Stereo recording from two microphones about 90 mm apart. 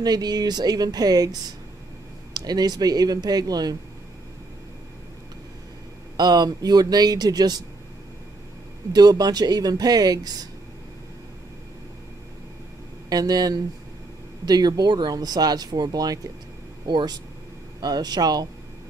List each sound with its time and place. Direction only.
0.0 s speech: 45° right (ahead or behind)
6.1 s speech: 50° right (ahead or behind)
8.9 s speech: 45° right (ahead or behind)
13.1 s speech: 45° right (ahead or behind)
16.8 s speech: 55° right (ahead or behind)